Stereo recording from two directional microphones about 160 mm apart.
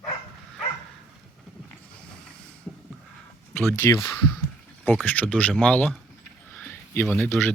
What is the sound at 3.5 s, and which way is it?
Speech, 15° left (ahead or behind).